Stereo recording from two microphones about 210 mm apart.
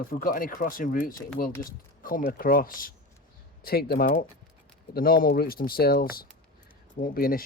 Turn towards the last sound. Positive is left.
turn(degrees=45)  # may be behind; listen again after turning